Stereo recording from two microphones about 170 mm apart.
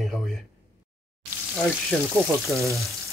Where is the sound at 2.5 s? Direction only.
15° right (ahead or behind).